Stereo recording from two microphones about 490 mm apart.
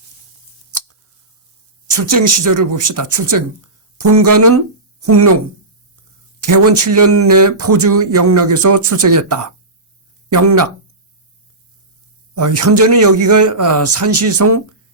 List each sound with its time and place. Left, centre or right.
1.9 s speech: right
6.4 s speech: right
12.3 s speech: right